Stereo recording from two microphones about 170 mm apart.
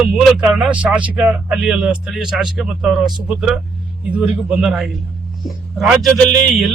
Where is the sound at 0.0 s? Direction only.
Centre (ahead or behind).